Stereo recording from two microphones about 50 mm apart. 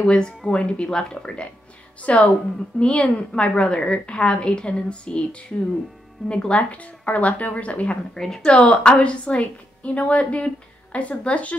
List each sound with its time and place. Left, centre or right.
0.0 s a woman's voice: centre
6.2 s a woman's voice: centre
8.1 s a woman's voice: centre
8.5 s a woman's voice: left